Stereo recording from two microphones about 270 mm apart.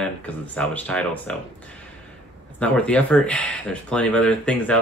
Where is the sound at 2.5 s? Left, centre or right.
Centre.